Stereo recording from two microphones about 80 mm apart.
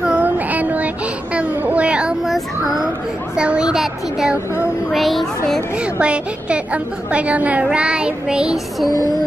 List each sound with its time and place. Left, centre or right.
0.0 s child singing: centre
1.3 s a sound: centre
2.2 s child singing: centre
3.3 s a woman's voice: centre
5.9 s a woman's voice: centre